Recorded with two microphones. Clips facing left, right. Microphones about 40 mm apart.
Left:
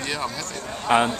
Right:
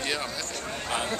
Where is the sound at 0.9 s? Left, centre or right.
Left.